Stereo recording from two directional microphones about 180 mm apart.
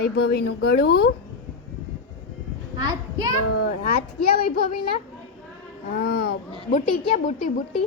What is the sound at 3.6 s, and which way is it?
Speech, 55° left (ahead or behind).